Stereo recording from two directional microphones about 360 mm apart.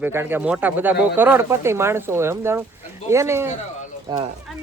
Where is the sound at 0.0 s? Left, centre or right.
Centre.